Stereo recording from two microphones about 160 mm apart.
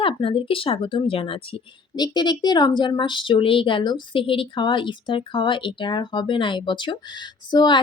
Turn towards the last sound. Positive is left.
turn(degrees=25)  # may be behind; listen again after turning